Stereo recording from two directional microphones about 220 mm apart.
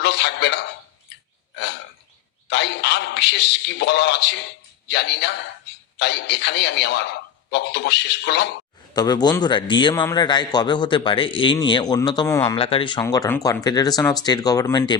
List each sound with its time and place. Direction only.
0.0 s speech: 50° left (ahead or behind)
2.5 s a man's voice: 50° left (ahead or behind)
8.9 s a man's voice: 20° left (ahead or behind)
12.5 s speech: 25° left (ahead or behind)